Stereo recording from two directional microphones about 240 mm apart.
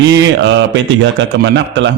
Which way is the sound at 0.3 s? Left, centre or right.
Right.